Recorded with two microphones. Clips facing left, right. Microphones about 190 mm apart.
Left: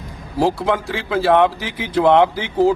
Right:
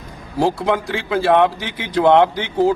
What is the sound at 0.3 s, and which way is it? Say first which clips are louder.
Speech: even; centre (ahead or behind).